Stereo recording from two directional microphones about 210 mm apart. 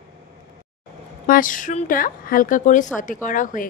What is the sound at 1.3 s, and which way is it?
Speech, 40° left (ahead or behind).